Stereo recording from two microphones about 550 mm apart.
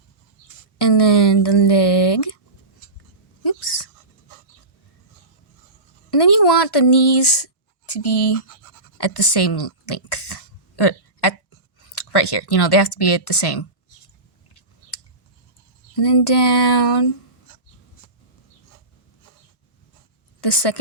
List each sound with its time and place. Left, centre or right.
0.8 s speech: left
3.4 s whispering: left
6.1 s speech: left
9.0 s throat clearing: left
11.9 s speech: left
16.0 s speech: left
20.4 s speech: left